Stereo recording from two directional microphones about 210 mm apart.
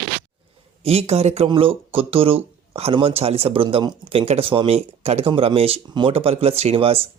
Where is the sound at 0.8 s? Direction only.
30° right (ahead or behind).